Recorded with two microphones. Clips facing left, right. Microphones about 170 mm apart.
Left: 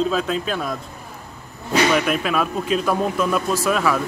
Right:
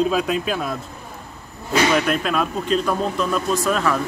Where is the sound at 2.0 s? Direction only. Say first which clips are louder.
Even; 5° left (ahead or behind).